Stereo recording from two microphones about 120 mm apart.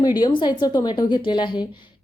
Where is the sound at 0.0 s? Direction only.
35° left (ahead or behind).